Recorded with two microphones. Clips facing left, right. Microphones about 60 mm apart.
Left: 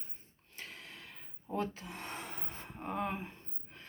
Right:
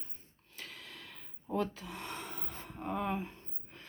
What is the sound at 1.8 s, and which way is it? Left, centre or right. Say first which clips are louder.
Gasp: right 1 dB; left.